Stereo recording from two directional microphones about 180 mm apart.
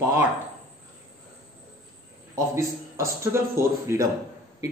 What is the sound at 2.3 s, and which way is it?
A man's voice, 15° right (ahead or behind).